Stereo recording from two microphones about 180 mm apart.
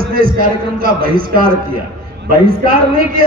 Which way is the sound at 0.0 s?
55° right (ahead or behind).